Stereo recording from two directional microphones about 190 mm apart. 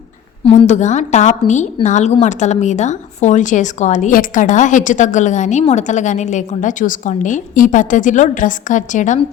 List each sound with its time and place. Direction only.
0.4 s a woman's voice: 35° left (ahead or behind)